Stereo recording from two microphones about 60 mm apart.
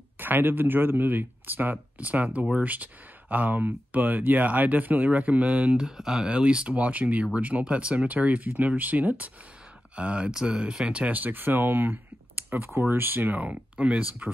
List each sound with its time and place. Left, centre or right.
0.2 s speech: right
5.8 s speech: centre; by 14.0 s right